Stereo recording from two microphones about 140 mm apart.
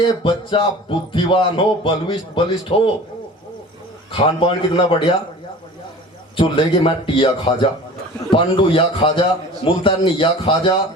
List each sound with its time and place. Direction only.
0.2 s speech: 35° left (ahead or behind)
4.1 s speech: 40° left (ahead or behind)
6.3 s speech: 40° left (ahead or behind)